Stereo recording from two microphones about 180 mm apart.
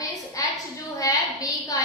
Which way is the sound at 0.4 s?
20° left (ahead or behind).